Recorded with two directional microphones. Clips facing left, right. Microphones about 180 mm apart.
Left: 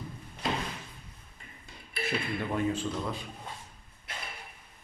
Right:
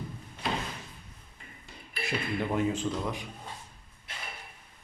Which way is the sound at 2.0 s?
15° right (ahead or behind).